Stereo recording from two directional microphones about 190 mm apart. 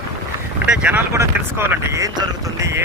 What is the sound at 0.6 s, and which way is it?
Speech, 5° right (ahead or behind).